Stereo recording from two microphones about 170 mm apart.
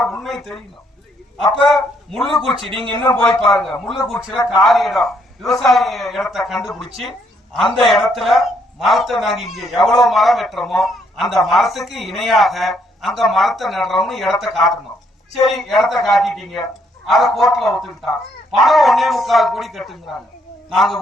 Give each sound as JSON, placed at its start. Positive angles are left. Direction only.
{"t": 0.0, "sound": "a sound", "side_deg": 0}
{"t": 1.4, "sound": "a man's voice", "side_deg": 0}
{"t": 2.6, "sound": "speech", "side_deg": -30}
{"t": 3.2, "sound": "a man's voice", "side_deg": 0}